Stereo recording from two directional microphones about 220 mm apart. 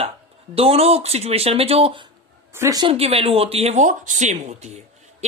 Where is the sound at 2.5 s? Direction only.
15° right (ahead or behind); by 4.8 s 30° right (ahead or behind).